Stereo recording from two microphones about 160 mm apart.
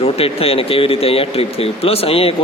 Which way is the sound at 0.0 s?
35° left (ahead or behind).